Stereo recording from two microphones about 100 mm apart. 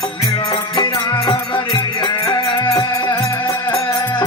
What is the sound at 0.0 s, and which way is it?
Music, 40° left (ahead or behind).